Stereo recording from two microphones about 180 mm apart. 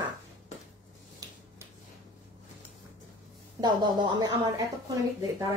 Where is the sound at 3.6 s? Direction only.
25° right (ahead or behind).